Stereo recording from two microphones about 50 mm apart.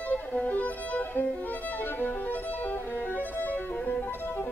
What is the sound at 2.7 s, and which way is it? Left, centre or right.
Music, left.